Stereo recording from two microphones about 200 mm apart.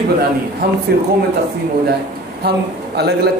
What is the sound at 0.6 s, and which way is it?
Speech, 50° right (ahead or behind).